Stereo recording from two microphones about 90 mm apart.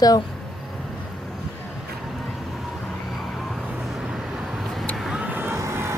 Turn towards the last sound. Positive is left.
turn(degrees=-30)  # may be behind; listen again after turning